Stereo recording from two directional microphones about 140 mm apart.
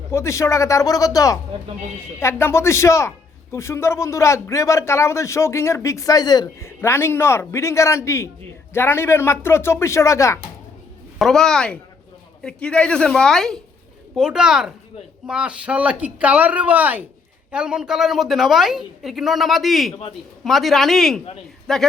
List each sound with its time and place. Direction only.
0.1 s a man's voice: 20° left (ahead or behind)
11.2 s a woman's voice: 5° left (ahead or behind)